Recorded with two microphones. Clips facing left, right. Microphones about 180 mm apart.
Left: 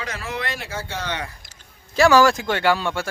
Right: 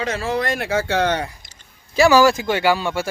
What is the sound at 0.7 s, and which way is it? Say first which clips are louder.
Speech: right 11 dB; 85° right.